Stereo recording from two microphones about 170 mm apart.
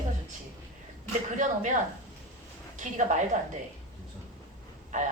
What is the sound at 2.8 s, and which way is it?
Speech, 45° right (ahead or behind).